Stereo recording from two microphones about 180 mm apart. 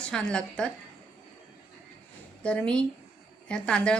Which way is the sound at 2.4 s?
5° left (ahead or behind).